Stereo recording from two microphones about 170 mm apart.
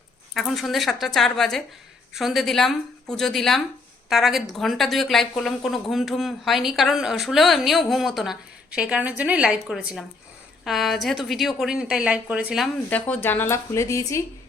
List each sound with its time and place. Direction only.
0.3 s speech: centre (ahead or behind)
12.9 s a woman's voice: 10° left (ahead or behind)